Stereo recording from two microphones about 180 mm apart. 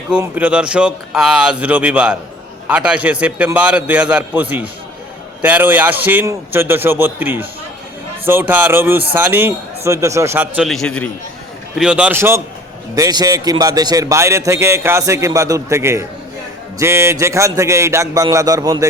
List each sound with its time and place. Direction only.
0.1 s a man's voice: 10° right (ahead or behind)
11.8 s a man's voice: 5° right (ahead or behind)